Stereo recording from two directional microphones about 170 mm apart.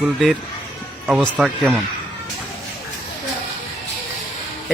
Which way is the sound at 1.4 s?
Centre (ahead or behind).